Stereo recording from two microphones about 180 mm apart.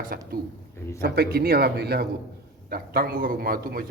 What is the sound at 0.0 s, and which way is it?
A man's voice, 50° right (ahead or behind).